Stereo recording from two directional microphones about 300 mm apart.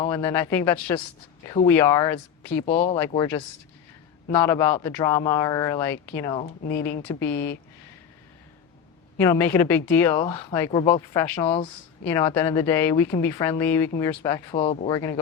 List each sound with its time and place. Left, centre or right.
0.0 s speech: centre
2.6 s speech: left
4.3 s speech: centre
6.4 s speech: left
7.1 s speech: centre
9.1 s speech: centre